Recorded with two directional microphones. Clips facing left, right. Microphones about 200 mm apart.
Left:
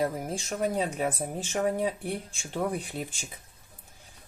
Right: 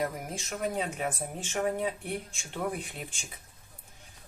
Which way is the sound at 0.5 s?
35° left (ahead or behind).